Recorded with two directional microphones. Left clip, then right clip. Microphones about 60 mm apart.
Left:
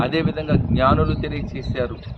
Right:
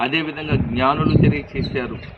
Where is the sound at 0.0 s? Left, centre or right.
Left.